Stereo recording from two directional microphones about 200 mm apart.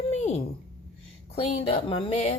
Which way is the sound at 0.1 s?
35° left (ahead or behind).